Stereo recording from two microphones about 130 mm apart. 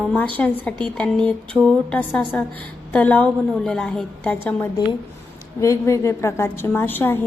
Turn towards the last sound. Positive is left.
turn(degrees=15)  # may be behind; listen again after turning